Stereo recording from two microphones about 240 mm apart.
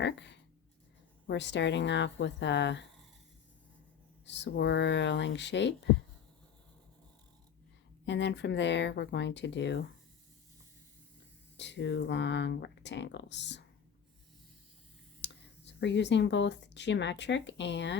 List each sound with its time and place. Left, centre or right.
0.0 s speech: left
4.3 s speech: left
8.0 s speech: left
11.5 s speech: left
15.2 s speech: left